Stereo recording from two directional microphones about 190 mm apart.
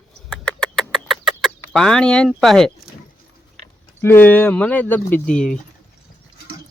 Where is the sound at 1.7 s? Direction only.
Centre (ahead or behind).